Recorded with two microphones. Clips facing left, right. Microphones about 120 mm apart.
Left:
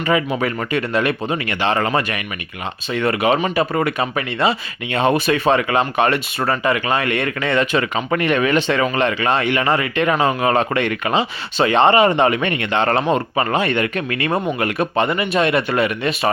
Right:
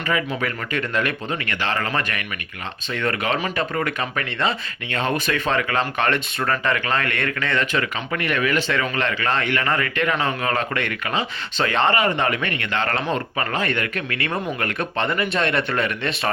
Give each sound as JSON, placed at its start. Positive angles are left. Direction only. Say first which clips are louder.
{"t": 0.3, "sound": "speech", "louder": "left 5 dB", "side_deg": 15}